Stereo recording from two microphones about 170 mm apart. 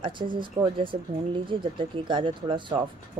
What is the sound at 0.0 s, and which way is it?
Speech, 30° right (ahead or behind).